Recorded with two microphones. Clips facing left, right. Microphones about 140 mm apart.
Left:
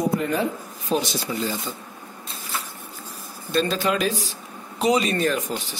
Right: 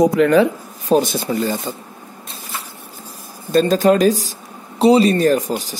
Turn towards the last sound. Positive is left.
turn(degrees=-40)  # may be behind; listen again after turning